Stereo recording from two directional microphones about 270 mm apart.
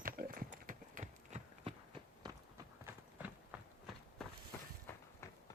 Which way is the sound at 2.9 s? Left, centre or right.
Centre.